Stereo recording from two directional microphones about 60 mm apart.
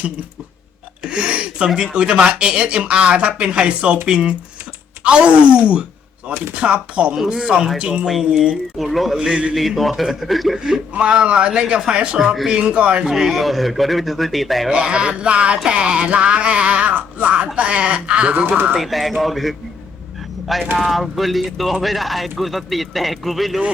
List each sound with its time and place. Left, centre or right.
1.0 s music: centre
4.0 s speech: centre
7.3 s music: centre
8.0 s speech: centre
9.1 s music: centre
9.5 s speech: centre
10.6 s music: centre
12.5 s speech: centre
13.1 s speech: centre
14.7 s music: centre
18.4 s speech: right
18.7 s speech: centre
20.7 s speech: centre